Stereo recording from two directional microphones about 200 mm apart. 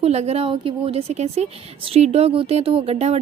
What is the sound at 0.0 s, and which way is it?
A woman's voice, 30° right (ahead or behind).